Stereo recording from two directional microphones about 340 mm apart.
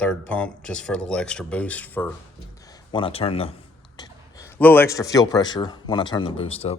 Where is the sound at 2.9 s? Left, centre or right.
Centre.